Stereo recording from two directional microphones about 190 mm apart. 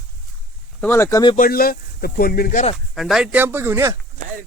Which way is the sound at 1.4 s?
50° left (ahead or behind).